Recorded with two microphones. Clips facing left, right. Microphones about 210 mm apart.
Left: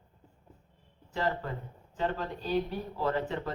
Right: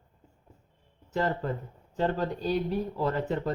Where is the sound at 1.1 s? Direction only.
35° right (ahead or behind).